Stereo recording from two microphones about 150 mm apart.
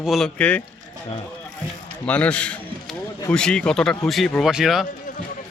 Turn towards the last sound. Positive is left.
turn(degrees=0)  # may be behind; listen again after turning